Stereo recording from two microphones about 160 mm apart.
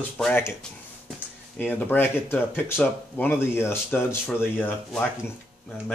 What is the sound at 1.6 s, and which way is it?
Speech, 10° left (ahead or behind).